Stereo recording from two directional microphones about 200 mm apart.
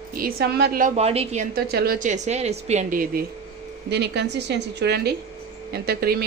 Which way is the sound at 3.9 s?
55° right (ahead or behind).